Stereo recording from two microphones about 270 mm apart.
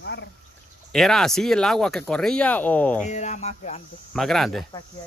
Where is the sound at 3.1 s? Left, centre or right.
Left.